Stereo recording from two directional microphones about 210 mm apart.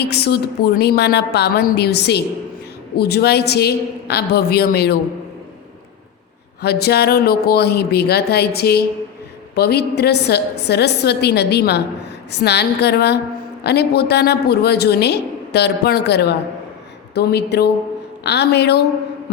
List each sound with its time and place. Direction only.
0.0 s a woman's voice: 50° left (ahead or behind)
6.6 s a woman's voice: 50° left (ahead or behind)